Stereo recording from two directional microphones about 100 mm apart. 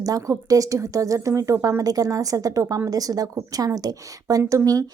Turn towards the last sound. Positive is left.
turn(degrees=-35)  # may be behind; listen again after turning